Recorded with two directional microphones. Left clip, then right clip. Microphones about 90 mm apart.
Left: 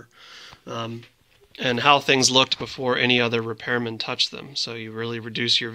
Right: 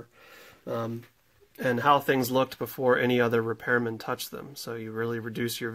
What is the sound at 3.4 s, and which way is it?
Speech, 10° right (ahead or behind).